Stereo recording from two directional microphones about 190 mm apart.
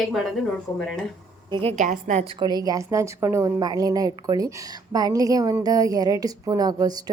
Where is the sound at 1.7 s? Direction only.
40° right (ahead or behind).